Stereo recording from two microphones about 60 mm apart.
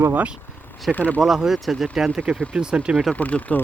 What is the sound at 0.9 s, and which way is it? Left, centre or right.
Speech, left.